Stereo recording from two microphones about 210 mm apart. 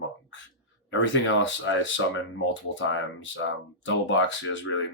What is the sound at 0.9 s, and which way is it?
Speech, 60° left (ahead or behind).